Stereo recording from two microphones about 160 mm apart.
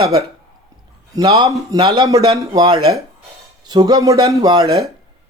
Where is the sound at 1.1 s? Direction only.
25° right (ahead or behind).